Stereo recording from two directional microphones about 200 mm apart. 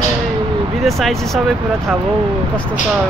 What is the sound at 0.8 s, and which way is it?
Speech, centre (ahead or behind).